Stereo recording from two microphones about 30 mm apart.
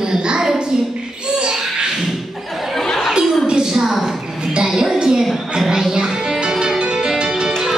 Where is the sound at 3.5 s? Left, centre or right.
Right.